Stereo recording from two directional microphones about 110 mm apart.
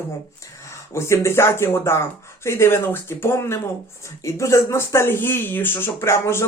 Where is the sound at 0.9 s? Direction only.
25° left (ahead or behind).